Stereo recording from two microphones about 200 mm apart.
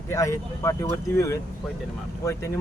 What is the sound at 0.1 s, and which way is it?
Speech, 15° left (ahead or behind).